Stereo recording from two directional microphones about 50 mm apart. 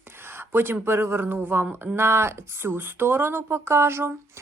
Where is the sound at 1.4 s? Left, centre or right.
Right.